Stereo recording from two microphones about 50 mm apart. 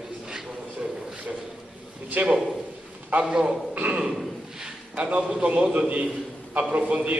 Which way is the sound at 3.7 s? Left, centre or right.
Right.